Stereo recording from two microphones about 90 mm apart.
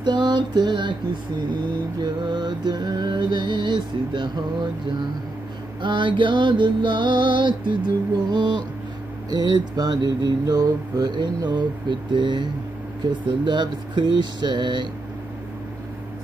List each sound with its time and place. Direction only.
0.0 s music: 55° right (ahead or behind)
5.8 s music: 60° right (ahead or behind)
9.3 s mantra: 50° right (ahead or behind)
13.3 s music: 60° right (ahead or behind)